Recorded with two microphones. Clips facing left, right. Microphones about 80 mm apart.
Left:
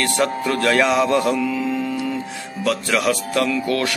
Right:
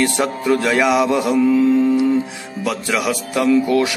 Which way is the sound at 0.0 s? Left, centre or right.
Centre.